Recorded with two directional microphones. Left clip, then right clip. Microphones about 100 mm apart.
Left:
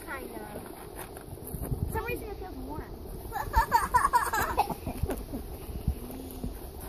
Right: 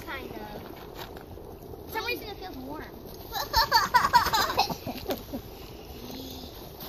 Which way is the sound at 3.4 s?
15° left (ahead or behind).